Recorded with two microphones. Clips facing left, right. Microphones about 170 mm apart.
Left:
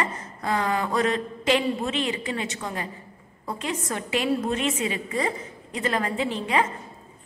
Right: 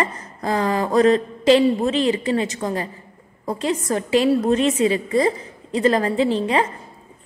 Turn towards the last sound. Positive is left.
turn(degrees=-35)  # may be behind; listen again after turning